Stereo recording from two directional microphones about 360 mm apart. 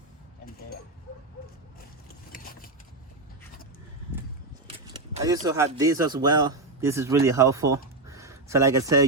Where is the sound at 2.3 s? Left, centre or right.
Left.